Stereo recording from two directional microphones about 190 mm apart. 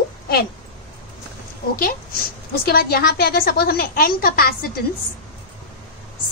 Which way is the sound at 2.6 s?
50° left (ahead or behind).